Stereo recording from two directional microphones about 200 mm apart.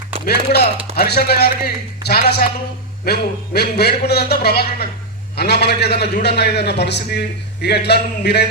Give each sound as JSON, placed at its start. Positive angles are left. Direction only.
{"t": 0.3, "sound": "a man's voice", "side_deg": 55}